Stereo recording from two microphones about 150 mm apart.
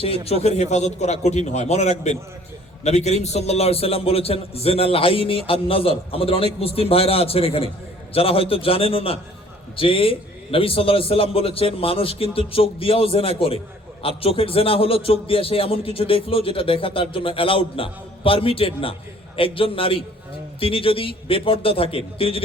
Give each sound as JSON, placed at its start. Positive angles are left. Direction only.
{"t": 0.0, "sound": "a man's voice", "side_deg": 40}